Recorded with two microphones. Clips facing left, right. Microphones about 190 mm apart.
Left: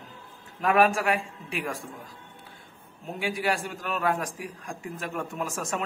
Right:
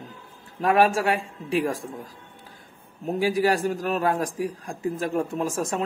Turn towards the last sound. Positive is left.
turn(degrees=-35)  # may be behind; listen again after turning